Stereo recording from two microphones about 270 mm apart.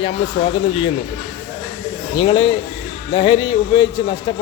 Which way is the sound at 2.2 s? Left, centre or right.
Centre.